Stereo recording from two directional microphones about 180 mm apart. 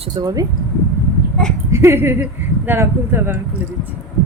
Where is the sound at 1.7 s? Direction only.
15° right (ahead or behind).